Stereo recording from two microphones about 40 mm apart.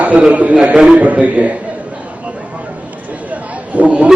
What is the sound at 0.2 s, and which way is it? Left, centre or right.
A man's voice, right.